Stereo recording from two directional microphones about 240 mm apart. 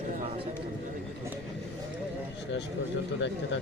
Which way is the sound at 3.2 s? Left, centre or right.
Left.